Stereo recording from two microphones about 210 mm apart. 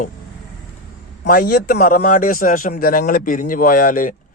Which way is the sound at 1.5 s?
40° left (ahead or behind).